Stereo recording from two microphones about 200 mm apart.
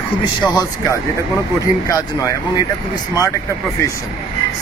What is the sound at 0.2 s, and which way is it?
Speech, 20° left (ahead or behind).